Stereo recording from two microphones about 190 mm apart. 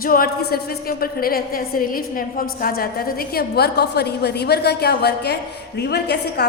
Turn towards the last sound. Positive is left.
turn(degrees=60)  # may be behind; listen again after turning